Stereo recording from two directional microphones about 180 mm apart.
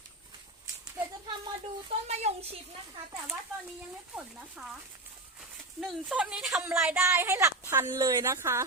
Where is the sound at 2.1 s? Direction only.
35° right (ahead or behind).